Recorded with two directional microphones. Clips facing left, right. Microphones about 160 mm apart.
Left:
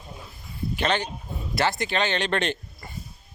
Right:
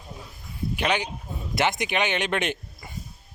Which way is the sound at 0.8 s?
10° right (ahead or behind).